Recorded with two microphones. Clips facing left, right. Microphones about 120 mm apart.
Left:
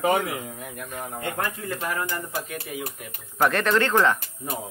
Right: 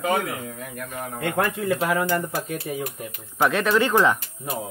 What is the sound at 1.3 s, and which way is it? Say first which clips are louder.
Speech: right 6 dB; 75° right (ahead or behind).